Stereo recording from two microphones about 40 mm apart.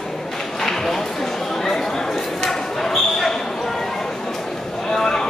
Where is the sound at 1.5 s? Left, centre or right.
Centre.